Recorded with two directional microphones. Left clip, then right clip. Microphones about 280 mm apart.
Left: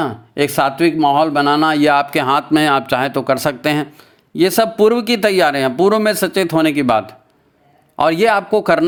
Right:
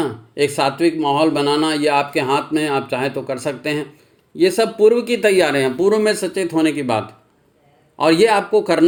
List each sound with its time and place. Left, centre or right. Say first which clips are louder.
0.0 s speech: left 1 dB; left